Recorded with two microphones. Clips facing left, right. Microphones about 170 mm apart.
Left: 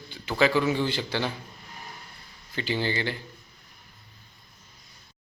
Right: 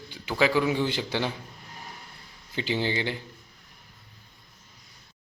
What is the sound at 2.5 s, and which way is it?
Speech, 15° right (ahead or behind).